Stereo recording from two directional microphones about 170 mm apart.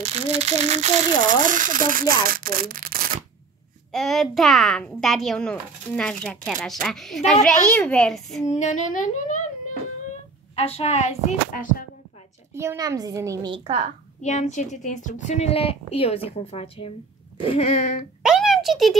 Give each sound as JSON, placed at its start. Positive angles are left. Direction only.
{"t": 0.0, "sound": "speech", "side_deg": -40}
{"t": 3.9, "sound": "a child's voice", "side_deg": 0}
{"t": 8.5, "sound": "speech", "side_deg": 45}
{"t": 10.5, "sound": "a woman's voice", "side_deg": 35}
{"t": 12.5, "sound": "a woman's voice", "side_deg": -20}
{"t": 14.2, "sound": "a woman's voice", "side_deg": 45}
{"t": 18.2, "sound": "a sound", "side_deg": -5}